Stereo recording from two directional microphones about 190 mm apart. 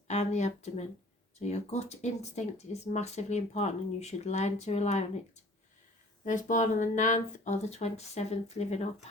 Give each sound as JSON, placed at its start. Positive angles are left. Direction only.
{"t": 0.1, "sound": "speech", "side_deg": 35}
{"t": 6.2, "sound": "speech", "side_deg": 40}